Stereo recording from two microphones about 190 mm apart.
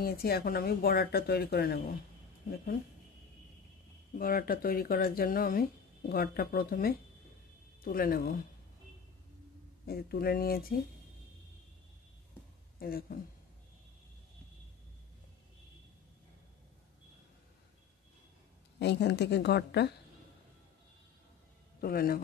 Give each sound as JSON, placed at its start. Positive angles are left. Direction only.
{"t": 0.0, "sound": "speech", "side_deg": 55}
{"t": 4.2, "sound": "speech", "side_deg": 50}
{"t": 9.8, "sound": "speech", "side_deg": 55}
{"t": 12.7, "sound": "speech", "side_deg": 50}
{"t": 18.8, "sound": "a woman's voice", "side_deg": 65}
{"t": 21.8, "sound": "speech", "side_deg": 50}